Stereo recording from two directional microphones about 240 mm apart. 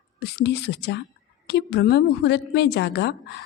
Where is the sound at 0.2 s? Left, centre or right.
Left.